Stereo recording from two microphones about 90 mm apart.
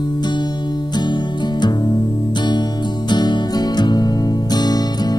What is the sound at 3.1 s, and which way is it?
Music, 50° left (ahead or behind).